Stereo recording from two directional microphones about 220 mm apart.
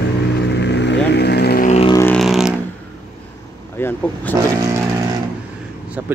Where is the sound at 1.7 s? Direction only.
25° left (ahead or behind).